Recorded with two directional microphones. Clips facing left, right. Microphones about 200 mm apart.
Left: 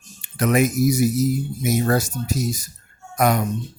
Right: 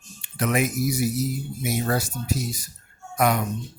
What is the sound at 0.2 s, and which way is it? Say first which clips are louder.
Speech: left 5 dB; 45° left (ahead or behind).